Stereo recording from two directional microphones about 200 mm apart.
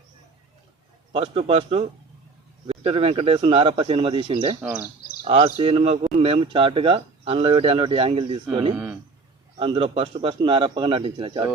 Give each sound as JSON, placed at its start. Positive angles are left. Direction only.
{"t": 1.1, "sound": "speech", "side_deg": -25}
{"t": 4.6, "sound": "speech", "side_deg": -5}
{"t": 5.2, "sound": "speech", "side_deg": -30}
{"t": 9.6, "sound": "speech", "side_deg": -25}